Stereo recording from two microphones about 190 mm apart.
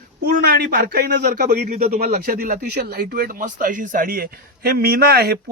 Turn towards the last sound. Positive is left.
turn(degrees=-55)  # may be behind; listen again after turning